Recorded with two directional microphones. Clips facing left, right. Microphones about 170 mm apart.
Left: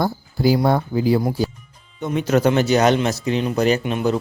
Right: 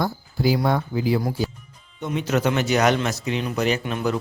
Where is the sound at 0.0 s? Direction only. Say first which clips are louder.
Left 3 dB; 35° left (ahead or behind).